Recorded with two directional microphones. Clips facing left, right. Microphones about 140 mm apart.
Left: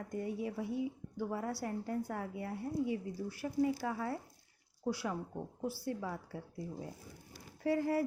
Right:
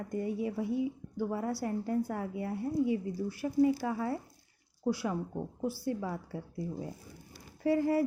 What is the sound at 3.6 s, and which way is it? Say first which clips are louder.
Speech: right 6 dB; 20° right (ahead or behind).